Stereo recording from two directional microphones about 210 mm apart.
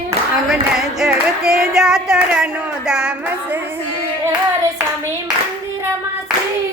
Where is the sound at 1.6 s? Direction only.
Centre (ahead or behind).